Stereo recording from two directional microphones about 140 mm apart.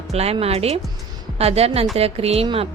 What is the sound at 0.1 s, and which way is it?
A woman's voice, 50° right (ahead or behind).